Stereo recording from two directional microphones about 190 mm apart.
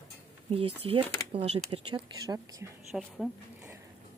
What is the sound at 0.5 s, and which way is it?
Speech, 30° right (ahead or behind).